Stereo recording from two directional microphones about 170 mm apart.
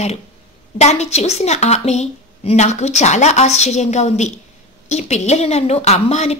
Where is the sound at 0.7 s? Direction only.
40° left (ahead or behind).